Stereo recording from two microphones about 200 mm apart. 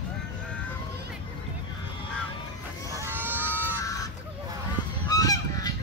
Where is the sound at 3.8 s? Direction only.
15° left (ahead or behind).